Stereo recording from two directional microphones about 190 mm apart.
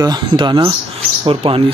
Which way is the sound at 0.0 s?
20° right (ahead or behind).